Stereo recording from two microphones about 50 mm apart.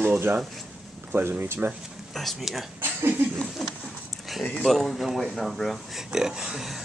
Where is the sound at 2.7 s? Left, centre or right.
Right.